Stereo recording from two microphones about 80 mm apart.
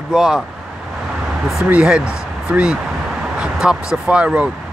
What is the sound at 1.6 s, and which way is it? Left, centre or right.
Speech, centre.